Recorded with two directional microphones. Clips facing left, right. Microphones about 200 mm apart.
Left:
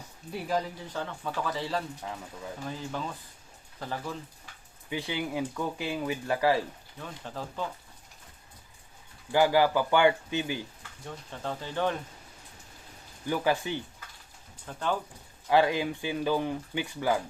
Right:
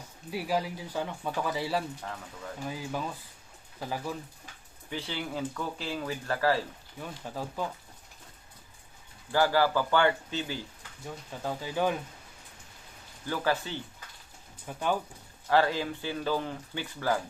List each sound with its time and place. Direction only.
0.3 s speech: 5° right (ahead or behind)
4.9 s speech: 15° left (ahead or behind)
7.0 s speech: 10° right (ahead or behind)
9.3 s speech: 15° left (ahead or behind)
11.0 s speech: 5° right (ahead or behind)
13.2 s speech: 15° left (ahead or behind)
14.7 s speech: 10° right (ahead or behind)
15.4 s speech: 15° left (ahead or behind)